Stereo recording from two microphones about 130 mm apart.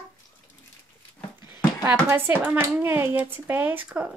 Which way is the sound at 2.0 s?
20° right (ahead or behind).